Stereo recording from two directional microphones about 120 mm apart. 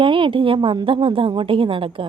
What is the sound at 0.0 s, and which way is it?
A woman's voice, 45° right (ahead or behind).